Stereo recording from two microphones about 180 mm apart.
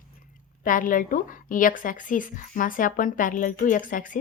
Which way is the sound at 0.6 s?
50° left (ahead or behind).